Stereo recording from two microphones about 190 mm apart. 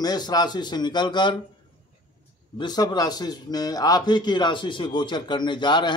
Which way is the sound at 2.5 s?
20° left (ahead or behind).